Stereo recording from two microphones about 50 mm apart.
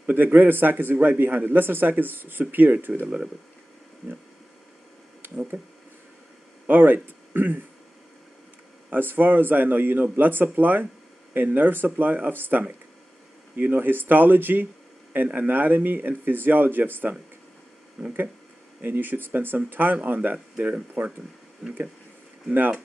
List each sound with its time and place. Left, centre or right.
0.0 s a man's voice: right
5.2 s a sound: right
6.7 s speech: right
8.9 s a man's voice: right
18.0 s speech: centre
18.8 s a man's voice: right
22.5 s a man's voice: right